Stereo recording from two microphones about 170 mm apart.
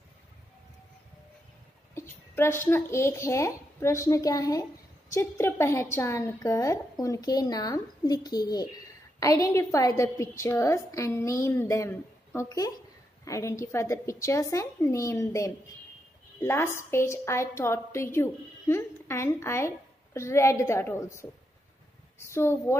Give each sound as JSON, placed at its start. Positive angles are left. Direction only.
{"t": 2.0, "sound": "a child's voice", "side_deg": 15}